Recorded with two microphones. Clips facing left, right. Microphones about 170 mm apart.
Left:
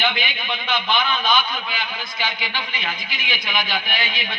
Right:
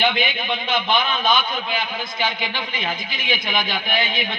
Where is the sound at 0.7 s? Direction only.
50° right (ahead or behind).